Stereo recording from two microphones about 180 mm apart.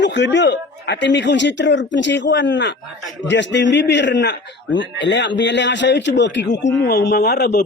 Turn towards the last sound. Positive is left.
turn(degrees=60)  # may be behind; listen again after turning